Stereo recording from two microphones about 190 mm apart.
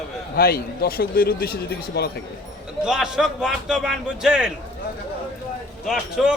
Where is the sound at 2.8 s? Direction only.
5° right (ahead or behind).